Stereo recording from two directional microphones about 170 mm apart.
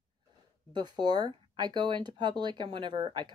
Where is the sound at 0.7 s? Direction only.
25° right (ahead or behind).